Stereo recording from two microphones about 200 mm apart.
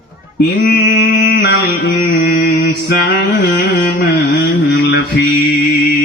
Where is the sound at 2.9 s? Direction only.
60° left (ahead or behind).